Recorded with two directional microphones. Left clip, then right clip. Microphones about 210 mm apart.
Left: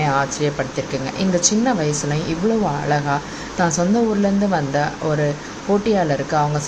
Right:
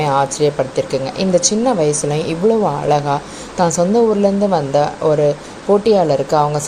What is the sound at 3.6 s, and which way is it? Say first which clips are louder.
Speech: right 5 dB; 15° right (ahead or behind).